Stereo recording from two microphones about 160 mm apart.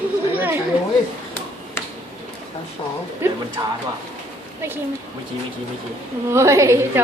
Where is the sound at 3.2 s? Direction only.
15° right (ahead or behind).